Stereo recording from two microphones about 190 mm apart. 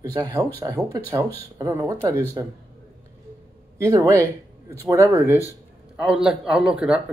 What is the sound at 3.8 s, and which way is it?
Speech, 15° right (ahead or behind).